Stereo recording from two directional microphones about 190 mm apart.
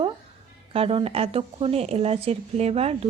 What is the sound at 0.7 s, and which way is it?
Speech, 30° right (ahead or behind).